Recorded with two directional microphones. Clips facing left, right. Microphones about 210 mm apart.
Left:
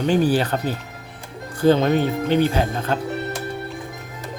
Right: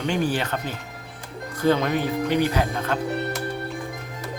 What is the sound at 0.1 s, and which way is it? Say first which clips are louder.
Speech: left 6 dB; 35° left (ahead or behind).